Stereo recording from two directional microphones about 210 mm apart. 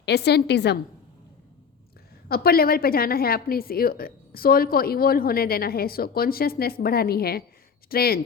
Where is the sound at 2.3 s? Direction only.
45° left (ahead or behind).